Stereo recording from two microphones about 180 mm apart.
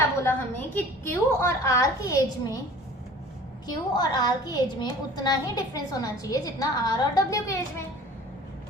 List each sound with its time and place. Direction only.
0.2 s a woman's voice: 15° left (ahead or behind)
3.7 s a woman's voice: 25° left (ahead or behind)